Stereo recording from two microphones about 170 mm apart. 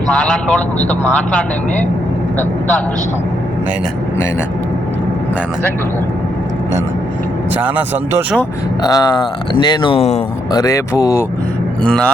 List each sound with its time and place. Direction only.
0.1 s a man's voice: 5° left (ahead or behind)
7.6 s speech: 10° right (ahead or behind)
8.8 s speech: 20° left (ahead or behind)
10.5 s speech: 20° left (ahead or behind)
11.8 s speech: 5° left (ahead or behind)